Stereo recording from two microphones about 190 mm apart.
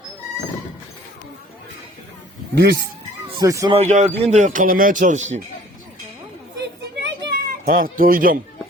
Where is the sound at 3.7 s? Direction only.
35° right (ahead or behind).